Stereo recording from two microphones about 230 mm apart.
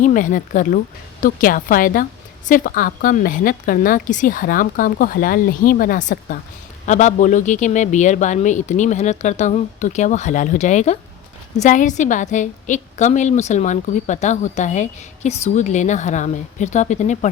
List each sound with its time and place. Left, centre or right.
0.0 s a woman's voice: left